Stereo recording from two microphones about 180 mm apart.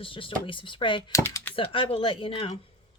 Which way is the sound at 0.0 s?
30° left (ahead or behind).